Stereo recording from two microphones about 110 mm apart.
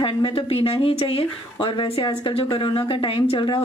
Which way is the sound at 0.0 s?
50° left (ahead or behind).